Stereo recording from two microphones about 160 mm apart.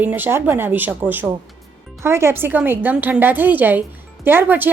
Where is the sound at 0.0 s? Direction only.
10° right (ahead or behind).